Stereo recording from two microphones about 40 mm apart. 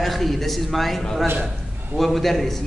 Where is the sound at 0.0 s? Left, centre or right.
Centre.